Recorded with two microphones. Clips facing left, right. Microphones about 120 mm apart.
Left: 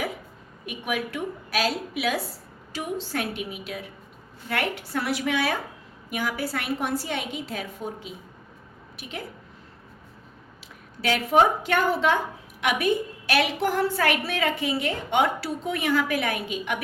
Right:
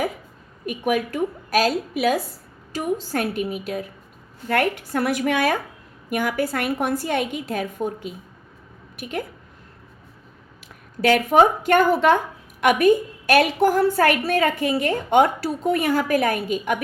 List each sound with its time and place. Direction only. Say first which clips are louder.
0.6 s a woman's voice: right 7 dB; 45° right (ahead or behind)
11.0 s a woman's voice: right 5 dB; 50° right (ahead or behind)